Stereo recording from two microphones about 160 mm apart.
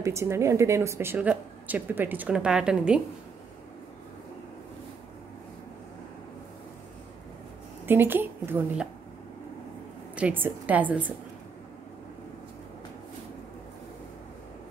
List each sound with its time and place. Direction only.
0.0 s a woman's voice: 15° right (ahead or behind)
7.8 s a woman's voice: 15° right (ahead or behind)
10.1 s a woman's voice: 10° right (ahead or behind)